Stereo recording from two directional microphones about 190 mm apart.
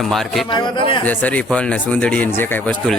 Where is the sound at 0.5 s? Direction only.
25° left (ahead or behind).